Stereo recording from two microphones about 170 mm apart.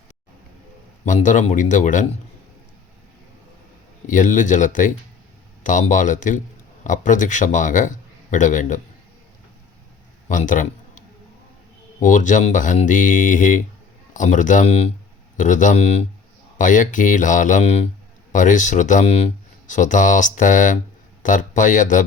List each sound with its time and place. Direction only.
1.0 s speech: 45° left (ahead or behind)
4.0 s speech: 50° left (ahead or behind)
10.2 s a man's voice: 50° left (ahead or behind)
12.0 s speech: 45° left (ahead or behind)